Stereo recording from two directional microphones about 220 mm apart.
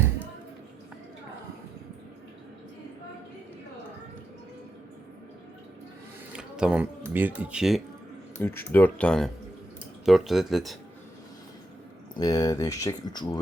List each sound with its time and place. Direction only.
6.3 s speech: 5° right (ahead or behind)
8.4 s speech: 10° left (ahead or behind)
12.2 s speech: 15° left (ahead or behind)